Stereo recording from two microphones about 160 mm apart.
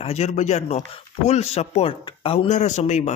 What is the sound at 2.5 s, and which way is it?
Speech, 50° left (ahead or behind).